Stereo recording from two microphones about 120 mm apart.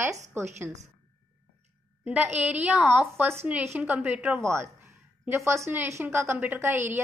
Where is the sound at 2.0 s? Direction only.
10° right (ahead or behind).